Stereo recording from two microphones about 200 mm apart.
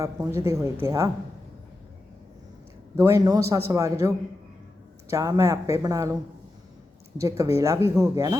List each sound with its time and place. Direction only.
0.0 s speech: 15° right (ahead or behind)
2.9 s speech: 15° right (ahead or behind)
7.2 s speech: 15° right (ahead or behind)